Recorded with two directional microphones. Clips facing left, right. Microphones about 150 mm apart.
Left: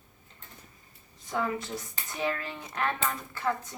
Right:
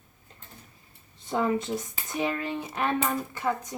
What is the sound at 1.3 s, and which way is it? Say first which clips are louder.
Speech: right 5 dB; 25° right (ahead or behind).